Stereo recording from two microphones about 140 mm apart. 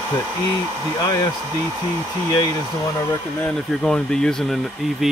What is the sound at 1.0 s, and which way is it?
Speech, 30° left (ahead or behind).